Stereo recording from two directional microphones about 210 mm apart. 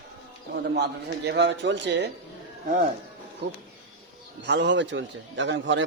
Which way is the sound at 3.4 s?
50° right (ahead or behind).